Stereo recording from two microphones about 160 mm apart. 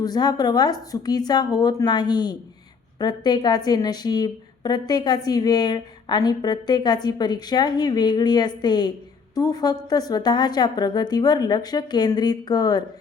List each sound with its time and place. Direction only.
0.0 s a woman's voice: 25° left (ahead or behind)